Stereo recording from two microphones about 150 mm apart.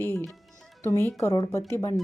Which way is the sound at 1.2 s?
20° left (ahead or behind).